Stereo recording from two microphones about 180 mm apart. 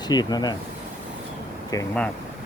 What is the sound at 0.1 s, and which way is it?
Speech, 20° left (ahead or behind).